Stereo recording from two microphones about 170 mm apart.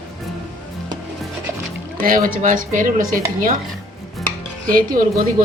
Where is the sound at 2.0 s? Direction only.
55° right (ahead or behind).